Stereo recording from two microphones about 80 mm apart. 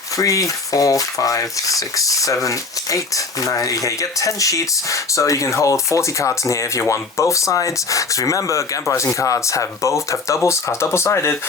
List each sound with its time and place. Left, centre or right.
0.2 s stir: left
9.1 s speech: left